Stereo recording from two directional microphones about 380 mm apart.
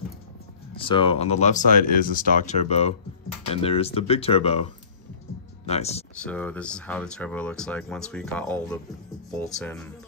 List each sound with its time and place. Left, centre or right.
0.7 s speech: centre
5.7 s speech: centre
6.1 s speech: centre